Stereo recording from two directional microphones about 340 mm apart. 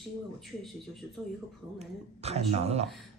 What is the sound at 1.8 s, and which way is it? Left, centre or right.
Speech, centre.